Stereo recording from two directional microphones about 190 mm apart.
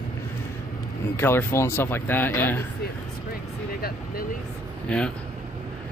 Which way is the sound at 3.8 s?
50° left (ahead or behind).